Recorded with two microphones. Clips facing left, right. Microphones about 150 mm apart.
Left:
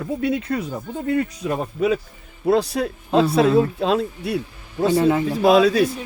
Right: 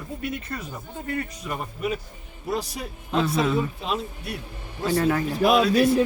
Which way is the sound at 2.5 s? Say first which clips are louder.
Left 10 dB; 80° left.